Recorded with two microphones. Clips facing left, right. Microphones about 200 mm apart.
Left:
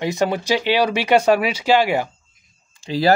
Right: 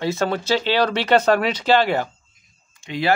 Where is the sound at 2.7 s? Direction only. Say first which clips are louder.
Left 5 dB; 35° left (ahead or behind).